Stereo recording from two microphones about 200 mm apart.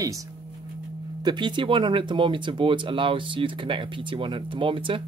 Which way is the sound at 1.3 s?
25° right (ahead or behind).